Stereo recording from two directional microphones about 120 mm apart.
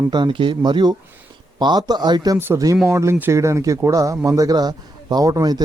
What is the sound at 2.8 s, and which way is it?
Speech, 20° right (ahead or behind).